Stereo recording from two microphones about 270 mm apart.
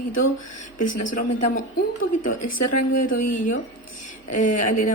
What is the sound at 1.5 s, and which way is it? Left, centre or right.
Speech, left.